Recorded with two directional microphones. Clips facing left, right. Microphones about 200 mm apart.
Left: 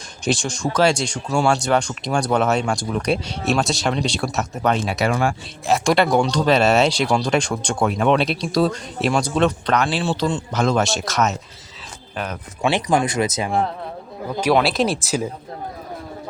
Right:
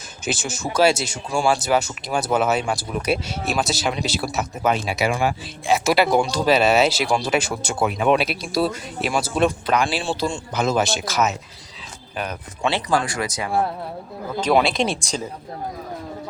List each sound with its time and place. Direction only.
0.3 s speech: 5° right (ahead or behind)
12.6 s speech: 15° left (ahead or behind)
14.5 s speech: centre (ahead or behind)